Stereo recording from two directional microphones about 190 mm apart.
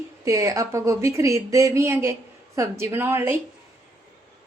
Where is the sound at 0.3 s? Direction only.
15° right (ahead or behind).